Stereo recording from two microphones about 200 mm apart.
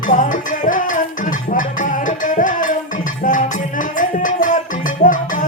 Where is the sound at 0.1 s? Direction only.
40° left (ahead or behind).